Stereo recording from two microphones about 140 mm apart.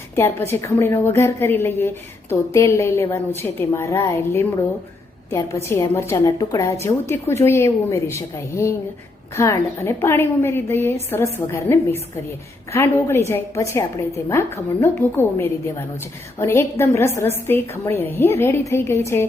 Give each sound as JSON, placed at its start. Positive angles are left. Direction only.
{"t": 0.2, "sound": "a woman's voice", "side_deg": 15}
{"t": 5.6, "sound": "a woman's voice", "side_deg": 20}